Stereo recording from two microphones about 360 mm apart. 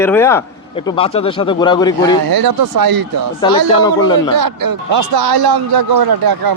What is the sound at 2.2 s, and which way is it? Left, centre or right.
A man's voice, right.